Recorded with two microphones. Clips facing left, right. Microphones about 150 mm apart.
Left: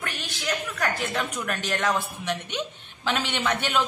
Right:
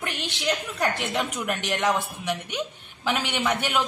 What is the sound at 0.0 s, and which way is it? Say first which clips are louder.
Speech: right 3 dB; 20° right (ahead or behind).